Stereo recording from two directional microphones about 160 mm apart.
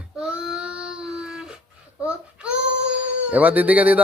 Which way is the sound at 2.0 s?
5° right (ahead or behind).